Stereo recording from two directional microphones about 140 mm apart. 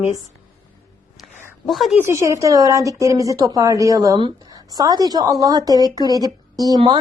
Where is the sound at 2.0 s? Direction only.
20° right (ahead or behind).